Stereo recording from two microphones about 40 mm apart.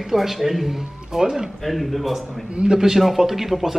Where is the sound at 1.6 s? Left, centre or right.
Centre.